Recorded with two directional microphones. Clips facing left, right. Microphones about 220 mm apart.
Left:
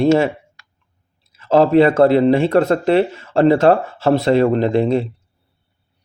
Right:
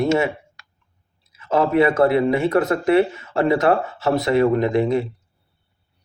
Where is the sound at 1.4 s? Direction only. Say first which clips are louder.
Left 5 dB; 30° left (ahead or behind).